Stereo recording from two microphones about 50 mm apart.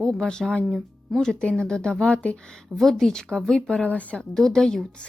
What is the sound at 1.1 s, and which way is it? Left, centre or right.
Speech, centre.